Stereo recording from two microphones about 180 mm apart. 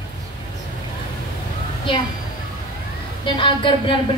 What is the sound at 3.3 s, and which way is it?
Speech, 30° left (ahead or behind).